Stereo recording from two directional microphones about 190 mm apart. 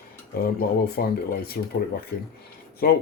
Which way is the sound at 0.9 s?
55° left (ahead or behind).